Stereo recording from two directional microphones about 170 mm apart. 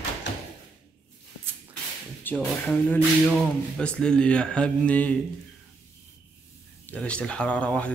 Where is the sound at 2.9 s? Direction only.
5° left (ahead or behind).